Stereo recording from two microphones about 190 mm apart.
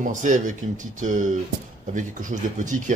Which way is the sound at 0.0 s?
40° right (ahead or behind).